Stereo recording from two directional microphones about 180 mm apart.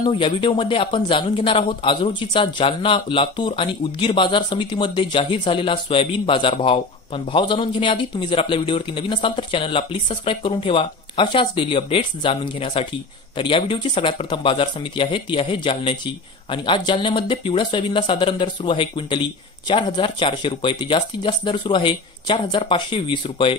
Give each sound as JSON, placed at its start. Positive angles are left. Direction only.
{"t": 0.0, "sound": "a man's voice", "side_deg": 25}